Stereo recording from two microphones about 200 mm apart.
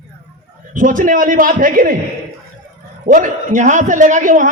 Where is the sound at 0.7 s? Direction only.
40° right (ahead or behind).